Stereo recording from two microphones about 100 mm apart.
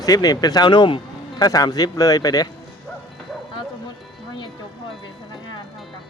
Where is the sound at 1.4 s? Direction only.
40° left (ahead or behind).